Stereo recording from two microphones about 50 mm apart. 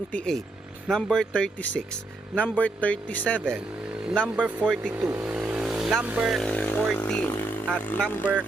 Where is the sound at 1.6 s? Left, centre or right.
Left.